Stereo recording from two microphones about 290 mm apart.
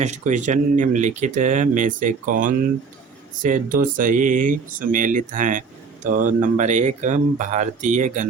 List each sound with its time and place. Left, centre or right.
0.0 s speech: right